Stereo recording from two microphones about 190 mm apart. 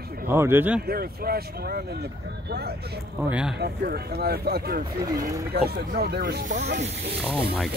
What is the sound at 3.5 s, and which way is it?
Speech, 55° right (ahead or behind).